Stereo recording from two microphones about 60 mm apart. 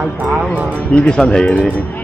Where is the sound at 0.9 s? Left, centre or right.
Centre.